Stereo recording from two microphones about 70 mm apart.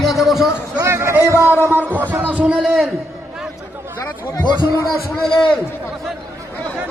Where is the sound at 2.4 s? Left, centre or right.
Centre.